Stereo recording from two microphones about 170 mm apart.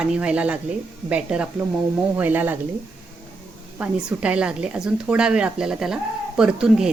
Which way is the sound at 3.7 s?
10° right (ahead or behind).